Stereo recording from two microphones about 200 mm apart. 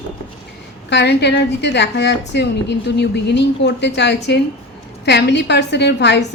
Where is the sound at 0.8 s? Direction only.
60° left (ahead or behind).